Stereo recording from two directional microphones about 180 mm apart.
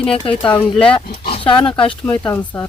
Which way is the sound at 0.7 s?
5° left (ahead or behind).